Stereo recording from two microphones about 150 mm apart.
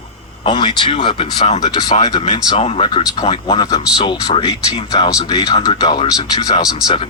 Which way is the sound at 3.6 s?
25° left (ahead or behind).